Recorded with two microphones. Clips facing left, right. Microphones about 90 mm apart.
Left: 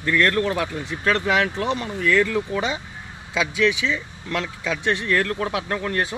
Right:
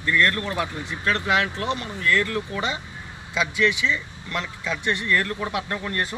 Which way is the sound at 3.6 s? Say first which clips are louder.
Left 2 dB; 90° left.